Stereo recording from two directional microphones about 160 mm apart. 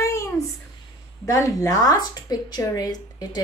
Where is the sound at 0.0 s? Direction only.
20° left (ahead or behind).